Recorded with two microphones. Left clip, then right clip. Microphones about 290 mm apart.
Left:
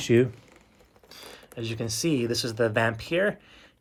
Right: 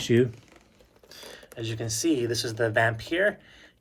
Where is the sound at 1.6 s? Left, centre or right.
Centre.